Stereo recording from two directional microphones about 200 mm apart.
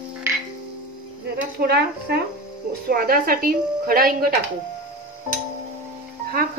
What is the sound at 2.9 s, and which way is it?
A woman's voice, 45° right (ahead or behind).